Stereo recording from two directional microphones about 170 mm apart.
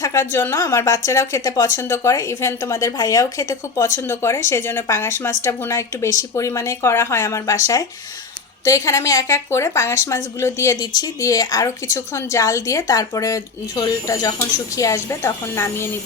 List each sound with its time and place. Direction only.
0.0 s a woman's voice: 20° left (ahead or behind)